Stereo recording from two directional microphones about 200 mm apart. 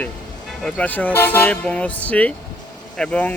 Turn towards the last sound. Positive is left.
turn(degrees=5)  # may be behind; listen again after turning